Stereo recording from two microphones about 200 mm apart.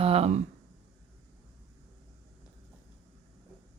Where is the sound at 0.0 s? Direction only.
30° right (ahead or behind).